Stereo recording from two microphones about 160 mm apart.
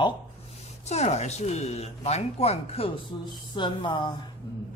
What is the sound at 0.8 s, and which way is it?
Speech, 45° left (ahead or behind).